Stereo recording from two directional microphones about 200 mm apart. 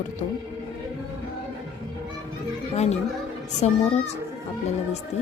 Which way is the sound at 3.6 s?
35° left (ahead or behind).